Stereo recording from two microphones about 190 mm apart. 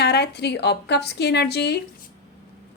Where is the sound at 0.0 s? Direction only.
60° left (ahead or behind).